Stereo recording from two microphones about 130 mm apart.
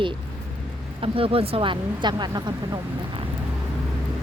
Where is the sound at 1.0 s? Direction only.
45° right (ahead or behind).